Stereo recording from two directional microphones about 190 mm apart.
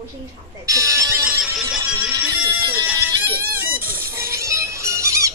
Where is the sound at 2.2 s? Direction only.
5° right (ahead or behind).